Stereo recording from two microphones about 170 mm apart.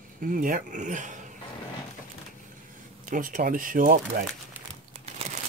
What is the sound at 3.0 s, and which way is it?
Speech, 50° right (ahead or behind).